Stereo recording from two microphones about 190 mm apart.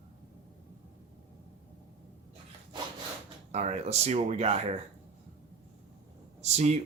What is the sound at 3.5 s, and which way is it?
Speech, 35° right (ahead or behind).